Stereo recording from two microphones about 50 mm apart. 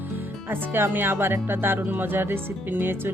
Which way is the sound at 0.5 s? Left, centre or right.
Right.